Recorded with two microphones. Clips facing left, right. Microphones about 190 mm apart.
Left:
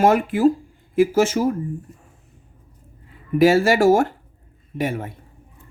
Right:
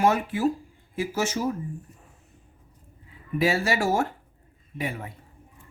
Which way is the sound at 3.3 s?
90° left.